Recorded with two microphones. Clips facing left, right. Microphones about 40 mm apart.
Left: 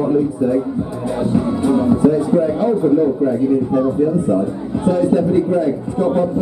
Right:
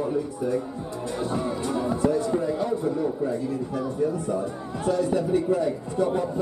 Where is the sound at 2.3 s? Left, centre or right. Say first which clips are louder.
Left 10 dB; left.